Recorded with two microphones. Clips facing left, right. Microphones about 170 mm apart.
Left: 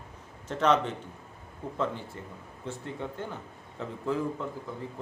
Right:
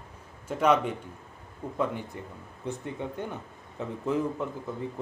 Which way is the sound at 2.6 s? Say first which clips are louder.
Right 2 dB; 15° right (ahead or behind).